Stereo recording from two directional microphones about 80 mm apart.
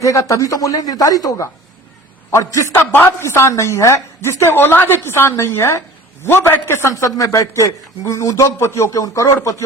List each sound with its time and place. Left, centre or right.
0.0 s a woman's voice: left
2.9 s a woman's voice: left
6.9 s a woman's voice: left